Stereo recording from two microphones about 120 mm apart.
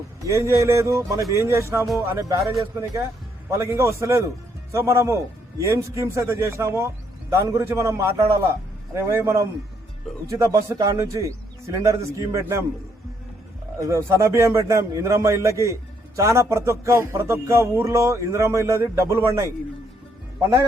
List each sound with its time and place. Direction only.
0.3 s speech: 25° right (ahead or behind)
3.5 s speech: 25° right (ahead or behind)
13.7 s speech: 25° right (ahead or behind)